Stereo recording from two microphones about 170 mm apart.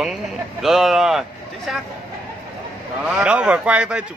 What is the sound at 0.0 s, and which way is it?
A man's voice, centre (ahead or behind).